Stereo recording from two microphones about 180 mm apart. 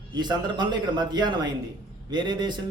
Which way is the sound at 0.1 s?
25° right (ahead or behind).